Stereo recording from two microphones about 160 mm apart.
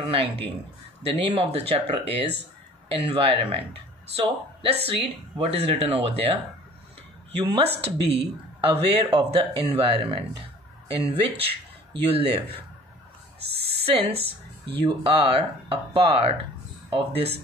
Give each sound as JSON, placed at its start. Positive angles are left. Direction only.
{"t": 0.0, "sound": "speech", "side_deg": -35}
{"t": 7.8, "sound": "speech", "side_deg": -35}
{"t": 13.7, "sound": "speech", "side_deg": -40}